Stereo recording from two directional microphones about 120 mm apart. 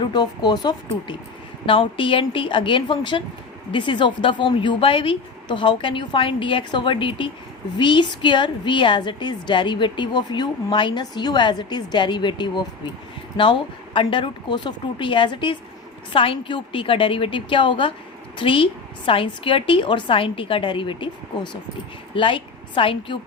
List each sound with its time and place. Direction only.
0.0 s a woman's voice: 35° left (ahead or behind)
1.6 s a woman's voice: 45° left (ahead or behind)